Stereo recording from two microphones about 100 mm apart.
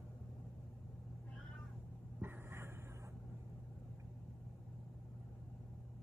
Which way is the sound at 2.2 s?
25° right (ahead or behind).